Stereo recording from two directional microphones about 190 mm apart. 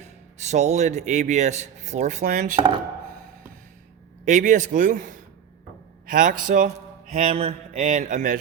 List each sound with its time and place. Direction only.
0.0 s a man's voice: 35° right (ahead or behind)
4.3 s a man's voice: 40° right (ahead or behind)